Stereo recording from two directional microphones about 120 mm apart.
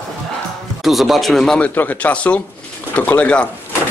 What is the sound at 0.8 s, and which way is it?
A man's voice, centre (ahead or behind).